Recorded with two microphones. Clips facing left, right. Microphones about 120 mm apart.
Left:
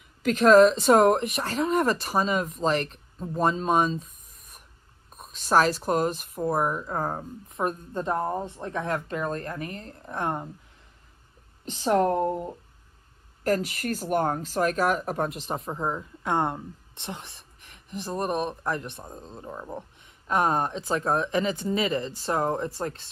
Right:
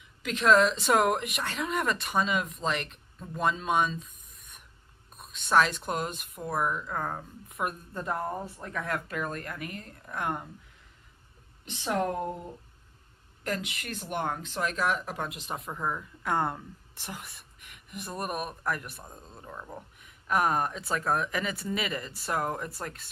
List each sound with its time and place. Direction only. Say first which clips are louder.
0.2 s speech: left 7 dB; 40° left (ahead or behind)
5.1 s speech: left 2 dB; 35° left (ahead or behind)
11.6 s speech: left 7 dB; 35° left (ahead or behind)
13.4 s speech: left 8 dB; 40° left (ahead or behind)